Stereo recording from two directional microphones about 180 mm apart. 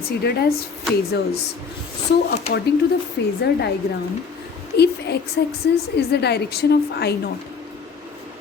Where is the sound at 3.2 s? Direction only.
70° left (ahead or behind).